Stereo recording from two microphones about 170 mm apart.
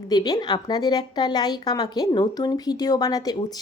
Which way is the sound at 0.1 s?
25° left (ahead or behind).